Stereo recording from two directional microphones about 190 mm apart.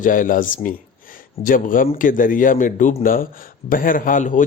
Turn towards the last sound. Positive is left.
turn(degrees=45)  # may be behind; listen again after turning